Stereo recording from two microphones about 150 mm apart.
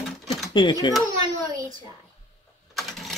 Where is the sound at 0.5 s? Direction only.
30° left (ahead or behind).